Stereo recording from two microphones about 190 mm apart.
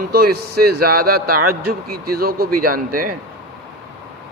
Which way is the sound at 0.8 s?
55° right (ahead or behind).